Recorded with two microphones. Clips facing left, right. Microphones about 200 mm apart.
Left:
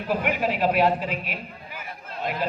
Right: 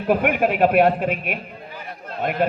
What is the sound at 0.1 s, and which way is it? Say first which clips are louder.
A woman's voice: right 6 dB; 55° right (ahead or behind).